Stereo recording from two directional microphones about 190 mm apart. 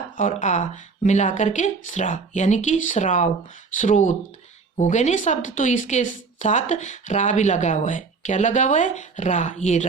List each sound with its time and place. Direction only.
0.2 s speech: 40° left (ahead or behind)